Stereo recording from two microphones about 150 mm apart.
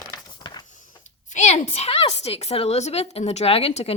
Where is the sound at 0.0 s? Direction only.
25° left (ahead or behind).